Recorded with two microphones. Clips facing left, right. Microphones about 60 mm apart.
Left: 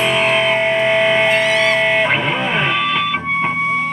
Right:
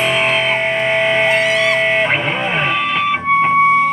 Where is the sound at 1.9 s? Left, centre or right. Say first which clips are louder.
Even; centre.